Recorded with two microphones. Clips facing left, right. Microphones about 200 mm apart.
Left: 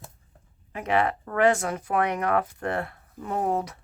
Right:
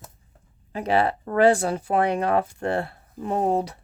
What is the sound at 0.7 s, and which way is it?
Speech, 30° right (ahead or behind).